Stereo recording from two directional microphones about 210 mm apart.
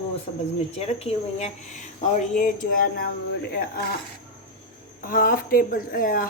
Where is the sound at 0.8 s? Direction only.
30° left (ahead or behind).